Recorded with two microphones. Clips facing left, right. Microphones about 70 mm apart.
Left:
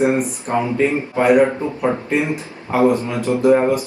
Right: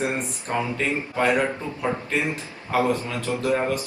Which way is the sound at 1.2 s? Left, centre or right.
Centre.